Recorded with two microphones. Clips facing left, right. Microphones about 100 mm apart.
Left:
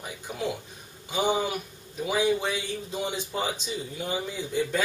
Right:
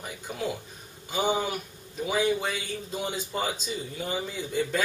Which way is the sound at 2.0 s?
5° left (ahead or behind).